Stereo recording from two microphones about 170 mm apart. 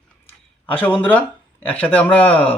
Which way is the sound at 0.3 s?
10° left (ahead or behind).